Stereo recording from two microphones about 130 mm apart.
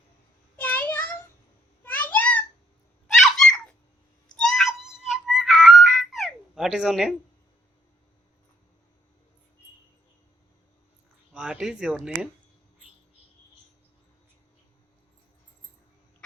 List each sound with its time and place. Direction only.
0.5 s a sound: 15° left (ahead or behind)
3.1 s cat: 5° left (ahead or behind)
4.4 s music: 5° left (ahead or behind)
11.3 s speech: 5° right (ahead or behind)